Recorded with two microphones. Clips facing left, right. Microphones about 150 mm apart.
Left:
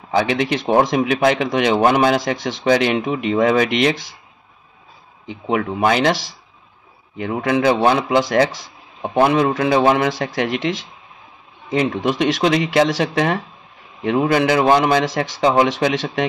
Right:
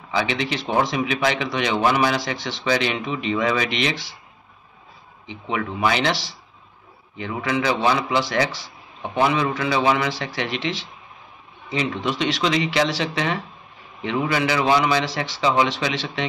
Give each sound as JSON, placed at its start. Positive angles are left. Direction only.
{"t": 0.1, "sound": "speech", "side_deg": 50}
{"t": 5.3, "sound": "speech", "side_deg": 50}